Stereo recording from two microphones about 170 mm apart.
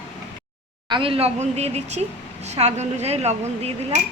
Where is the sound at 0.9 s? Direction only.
30° right (ahead or behind).